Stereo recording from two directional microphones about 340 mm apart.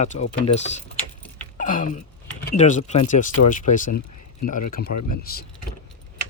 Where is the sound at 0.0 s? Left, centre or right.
Centre.